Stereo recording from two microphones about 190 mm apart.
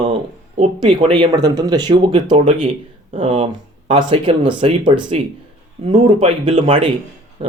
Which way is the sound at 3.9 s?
25° right (ahead or behind).